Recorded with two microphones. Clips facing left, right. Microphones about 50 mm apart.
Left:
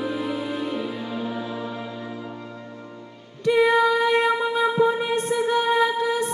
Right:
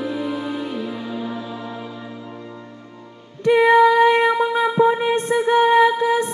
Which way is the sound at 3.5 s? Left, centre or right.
Right.